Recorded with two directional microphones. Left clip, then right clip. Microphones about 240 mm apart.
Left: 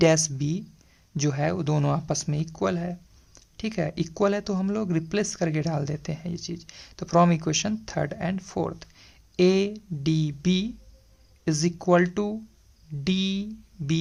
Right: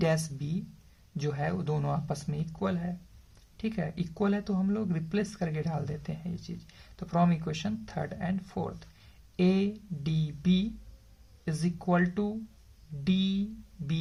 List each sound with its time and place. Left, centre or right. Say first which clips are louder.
0.0 s speech: left 9 dB; left